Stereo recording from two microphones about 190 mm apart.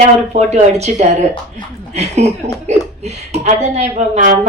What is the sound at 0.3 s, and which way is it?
Speech, 35° right (ahead or behind).